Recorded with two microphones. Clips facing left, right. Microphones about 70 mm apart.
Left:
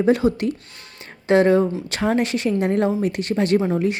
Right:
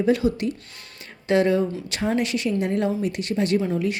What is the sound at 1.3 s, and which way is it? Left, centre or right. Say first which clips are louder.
A woman's voice: left 4 dB; left.